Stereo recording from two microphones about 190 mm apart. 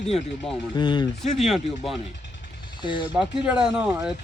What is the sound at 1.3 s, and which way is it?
Speech, centre (ahead or behind).